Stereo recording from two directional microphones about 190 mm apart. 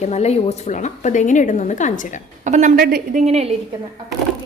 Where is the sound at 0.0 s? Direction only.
35° left (ahead or behind).